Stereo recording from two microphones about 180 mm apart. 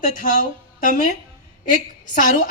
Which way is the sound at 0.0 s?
50° left (ahead or behind).